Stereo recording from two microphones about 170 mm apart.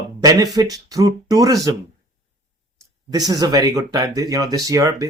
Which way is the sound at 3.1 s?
20° right (ahead or behind).